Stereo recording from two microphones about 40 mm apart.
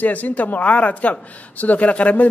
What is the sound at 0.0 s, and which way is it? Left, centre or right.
A man's voice, left.